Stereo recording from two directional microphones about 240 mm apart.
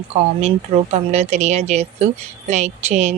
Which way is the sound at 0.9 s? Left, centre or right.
Right.